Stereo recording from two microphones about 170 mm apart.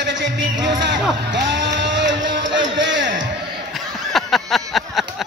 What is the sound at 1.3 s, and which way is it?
Music, 90° right.